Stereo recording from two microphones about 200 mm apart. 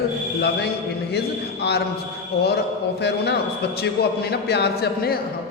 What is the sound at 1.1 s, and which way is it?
A man's voice, 55° left (ahead or behind).